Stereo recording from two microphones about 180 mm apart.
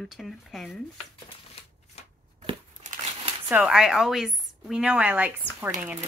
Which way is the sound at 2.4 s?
40° right (ahead or behind).